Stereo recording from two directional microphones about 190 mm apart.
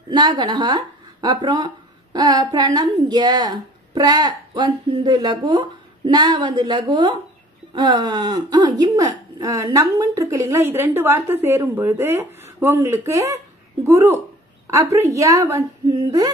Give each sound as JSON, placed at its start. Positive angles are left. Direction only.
{"t": 0.1, "sound": "a woman's voice", "side_deg": -25}